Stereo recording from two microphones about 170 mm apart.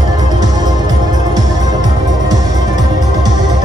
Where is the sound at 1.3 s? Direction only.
20° right (ahead or behind).